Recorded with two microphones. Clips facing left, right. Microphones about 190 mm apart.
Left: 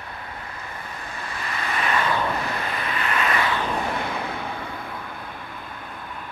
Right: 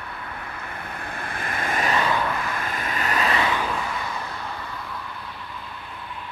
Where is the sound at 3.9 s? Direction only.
60° left (ahead or behind).